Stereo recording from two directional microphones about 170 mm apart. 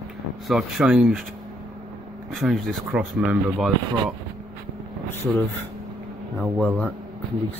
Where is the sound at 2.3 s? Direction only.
Centre (ahead or behind).